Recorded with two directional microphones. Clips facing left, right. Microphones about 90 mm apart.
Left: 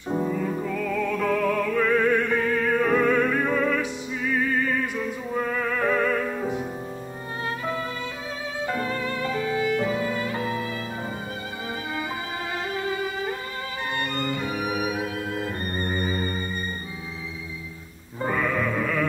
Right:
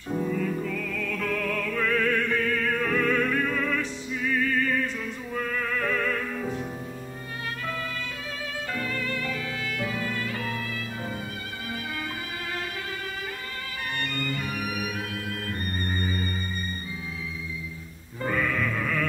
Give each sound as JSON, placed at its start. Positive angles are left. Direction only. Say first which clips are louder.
{"t": 0.3, "sound": "music", "louder": "left 2 dB", "side_deg": 15}
{"t": 7.4, "sound": "music", "louder": "left 4 dB", "side_deg": 20}
{"t": 8.6, "sound": "violin", "louder": "left 5 dB", "side_deg": 25}
{"t": 12.7, "sound": "music", "louder": "left 7 dB", "side_deg": 20}
{"t": 18.2, "sound": "music", "louder": "left 2 dB", "side_deg": 15}